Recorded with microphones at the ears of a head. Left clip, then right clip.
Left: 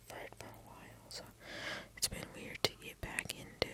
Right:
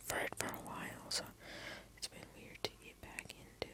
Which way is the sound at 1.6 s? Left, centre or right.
Left.